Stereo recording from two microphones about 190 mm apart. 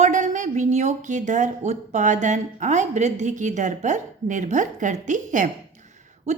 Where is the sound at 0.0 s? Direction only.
40° right (ahead or behind).